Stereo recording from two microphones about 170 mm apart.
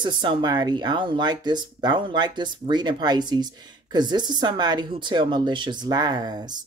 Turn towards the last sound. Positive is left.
turn(degrees=-25)  # may be behind; listen again after turning